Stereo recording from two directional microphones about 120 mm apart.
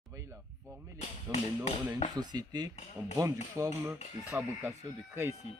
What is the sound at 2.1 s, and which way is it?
Speech, 35° right (ahead or behind).